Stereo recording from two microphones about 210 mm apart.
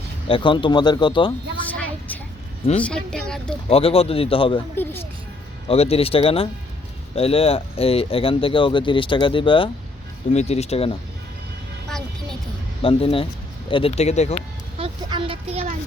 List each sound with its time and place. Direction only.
0.3 s speech: 25° left (ahead or behind)
1.7 s vehicle: 5° left (ahead or behind)
2.8 s speech: 5° left (ahead or behind)
3.7 s speech: 30° left (ahead or behind)
4.8 s a sound: 10° left (ahead or behind)
5.6 s speech: 30° left (ahead or behind)
12.8 s speech: 25° left (ahead or behind)
14.8 s speech: 25° right (ahead or behind)